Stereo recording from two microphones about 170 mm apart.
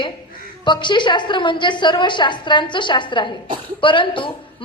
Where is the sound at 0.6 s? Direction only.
25° left (ahead or behind).